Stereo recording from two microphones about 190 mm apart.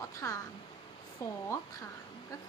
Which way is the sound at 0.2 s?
15° left (ahead or behind).